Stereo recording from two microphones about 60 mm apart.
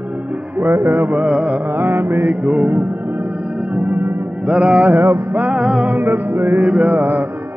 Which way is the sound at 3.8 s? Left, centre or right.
Right.